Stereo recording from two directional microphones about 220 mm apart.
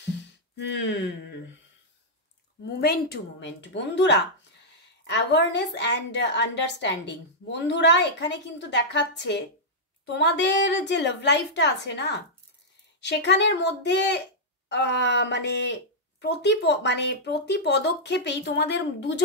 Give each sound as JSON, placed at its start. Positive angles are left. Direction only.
{"t": 0.6, "sound": "speech", "side_deg": 55}
{"t": 2.6, "sound": "a woman's voice", "side_deg": 45}